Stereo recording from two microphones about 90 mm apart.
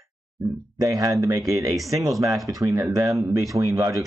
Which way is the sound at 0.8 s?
40° right (ahead or behind).